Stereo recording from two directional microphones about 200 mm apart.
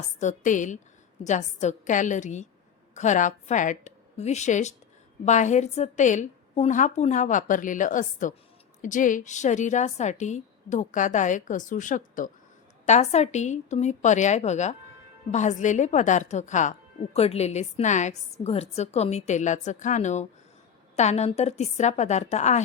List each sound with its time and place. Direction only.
0.2 s a woman's voice: 40° left (ahead or behind)